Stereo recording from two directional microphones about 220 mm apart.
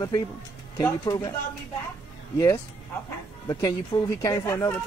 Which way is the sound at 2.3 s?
15° left (ahead or behind).